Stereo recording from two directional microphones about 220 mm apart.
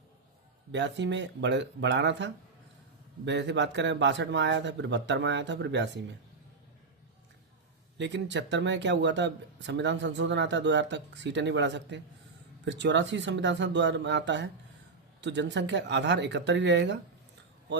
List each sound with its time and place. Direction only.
0.7 s speech: 55° right (ahead or behind)
7.9 s speech: 55° right (ahead or behind)